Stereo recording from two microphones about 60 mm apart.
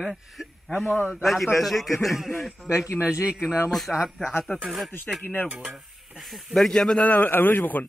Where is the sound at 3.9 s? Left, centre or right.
Centre.